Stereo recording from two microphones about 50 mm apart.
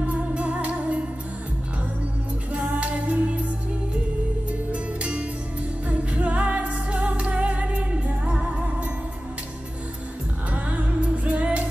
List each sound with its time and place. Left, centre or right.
0.0 s music: right
2.8 s music: right
5.9 s music: right
11.2 s music: right